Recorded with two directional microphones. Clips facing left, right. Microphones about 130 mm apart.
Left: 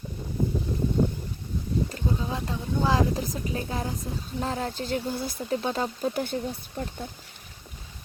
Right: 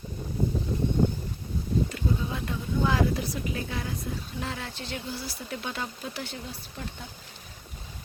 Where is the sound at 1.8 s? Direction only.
35° left (ahead or behind); by 5.3 s 50° left (ahead or behind).